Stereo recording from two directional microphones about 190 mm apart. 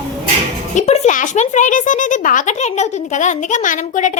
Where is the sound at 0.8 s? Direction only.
40° left (ahead or behind).